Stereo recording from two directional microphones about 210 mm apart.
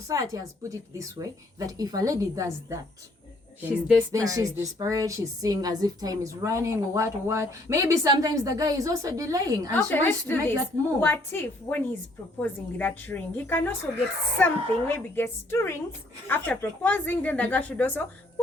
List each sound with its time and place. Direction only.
0.1 s a woman's voice: 15° right (ahead or behind)
9.7 s a woman's voice: 10° left (ahead or behind)